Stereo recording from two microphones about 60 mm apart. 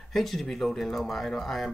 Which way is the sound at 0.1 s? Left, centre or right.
Centre.